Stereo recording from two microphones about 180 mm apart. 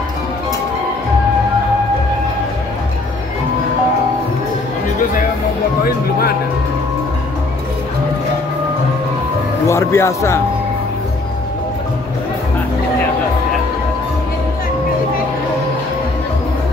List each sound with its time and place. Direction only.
5.9 s music: 60° left (ahead or behind)
9.7 s speech: 15° left (ahead or behind)